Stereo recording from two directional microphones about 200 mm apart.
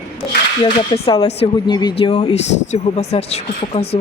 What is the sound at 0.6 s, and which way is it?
Speech, 25° left (ahead or behind).